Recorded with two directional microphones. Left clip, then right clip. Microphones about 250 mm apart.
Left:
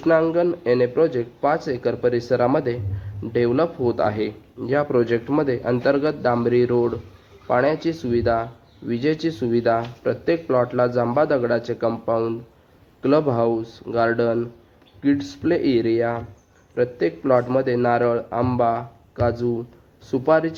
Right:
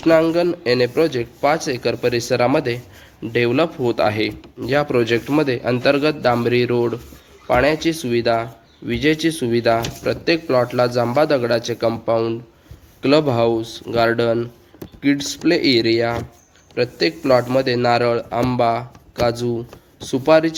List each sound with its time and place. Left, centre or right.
0.0 s speech: right